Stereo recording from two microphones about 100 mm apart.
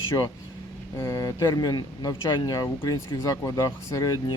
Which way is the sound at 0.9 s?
30° left (ahead or behind).